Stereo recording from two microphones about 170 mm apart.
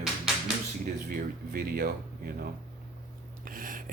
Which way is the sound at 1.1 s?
60° right (ahead or behind).